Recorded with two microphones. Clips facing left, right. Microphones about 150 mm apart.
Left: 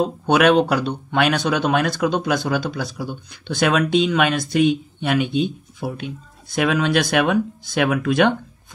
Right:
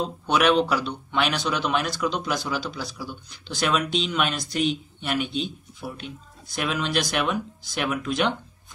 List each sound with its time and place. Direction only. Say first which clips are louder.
0.0 s speech: left 6 dB; 55° left (ahead or behind)